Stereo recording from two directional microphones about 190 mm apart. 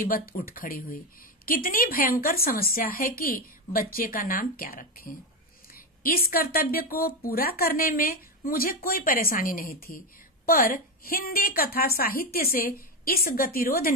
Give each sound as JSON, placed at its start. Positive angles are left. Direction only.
{"t": 0.1, "sound": "speech", "side_deg": 50}
{"t": 6.3, "sound": "speech", "side_deg": 50}